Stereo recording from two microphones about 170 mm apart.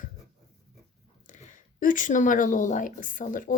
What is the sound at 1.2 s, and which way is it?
Speech, 50° left (ahead or behind).